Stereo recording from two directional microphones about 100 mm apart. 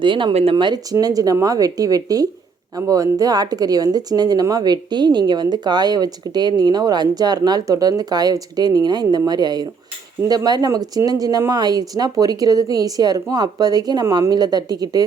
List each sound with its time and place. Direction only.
0.0 s a woman's voice: 55° right (ahead or behind)